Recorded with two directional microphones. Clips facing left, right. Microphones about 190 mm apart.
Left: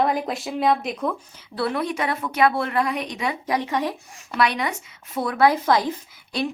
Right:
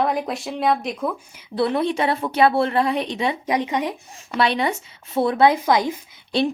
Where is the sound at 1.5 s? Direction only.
25° right (ahead or behind).